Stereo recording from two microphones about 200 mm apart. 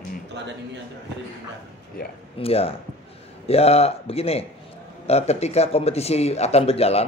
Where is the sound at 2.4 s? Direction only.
30° left (ahead or behind).